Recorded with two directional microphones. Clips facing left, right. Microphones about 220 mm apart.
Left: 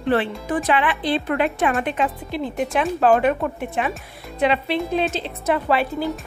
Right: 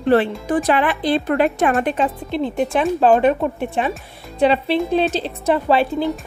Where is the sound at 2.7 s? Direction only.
30° right (ahead or behind).